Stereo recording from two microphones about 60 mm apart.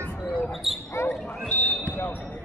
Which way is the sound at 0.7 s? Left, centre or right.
Centre.